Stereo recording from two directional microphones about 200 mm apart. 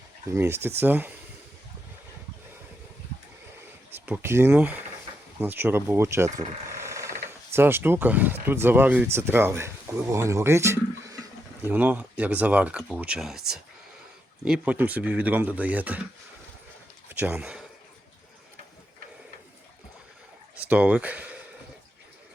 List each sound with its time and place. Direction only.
0.3 s speech: 10° right (ahead or behind)
3.9 s speech: 10° right (ahead or behind)
17.1 s a man's voice: 10° right (ahead or behind)
20.7 s speech: 5° right (ahead or behind)